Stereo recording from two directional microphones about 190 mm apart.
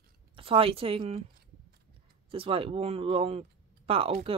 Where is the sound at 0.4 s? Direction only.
30° right (ahead or behind).